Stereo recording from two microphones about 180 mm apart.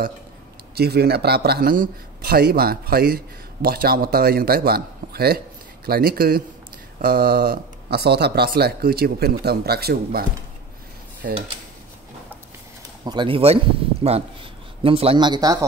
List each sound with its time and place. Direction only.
0.7 s speech: 60° right (ahead or behind)
11.2 s speech: 55° right (ahead or behind)
13.0 s speech: 25° right (ahead or behind)